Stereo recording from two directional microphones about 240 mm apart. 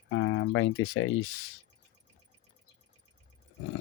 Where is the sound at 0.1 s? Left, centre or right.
Left.